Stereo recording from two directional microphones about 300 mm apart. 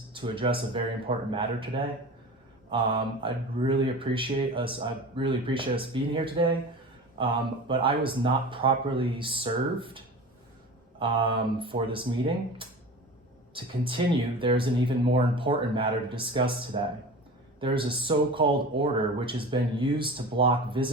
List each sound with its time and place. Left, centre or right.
0.1 s speech: centre
11.0 s speech: centre